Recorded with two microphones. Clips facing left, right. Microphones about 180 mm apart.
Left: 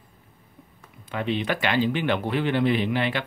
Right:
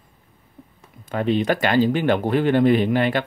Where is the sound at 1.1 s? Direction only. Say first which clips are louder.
Right 6 dB; 40° right (ahead or behind).